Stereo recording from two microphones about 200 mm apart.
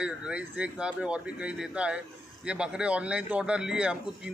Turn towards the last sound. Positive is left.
turn(degrees=-5)  # may be behind; listen again after turning